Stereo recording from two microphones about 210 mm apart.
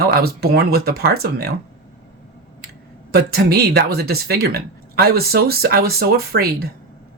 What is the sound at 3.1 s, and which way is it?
Speech, 50° right (ahead or behind).